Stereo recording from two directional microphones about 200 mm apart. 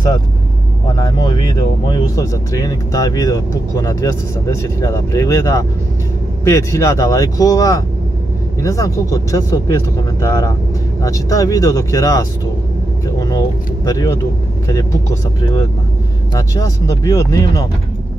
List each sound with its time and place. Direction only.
0.9 s speech: 20° left (ahead or behind)
13.0 s vehicle: 15° left (ahead or behind)
13.8 s speech: 20° left (ahead or behind)
16.5 s speech: 15° left (ahead or behind)